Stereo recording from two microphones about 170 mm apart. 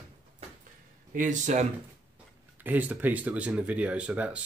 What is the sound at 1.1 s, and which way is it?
Speech, 50° right (ahead or behind).